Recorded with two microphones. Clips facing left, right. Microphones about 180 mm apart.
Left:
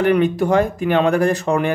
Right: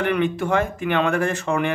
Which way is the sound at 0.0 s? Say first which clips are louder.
Left 6 dB; 40° left (ahead or behind).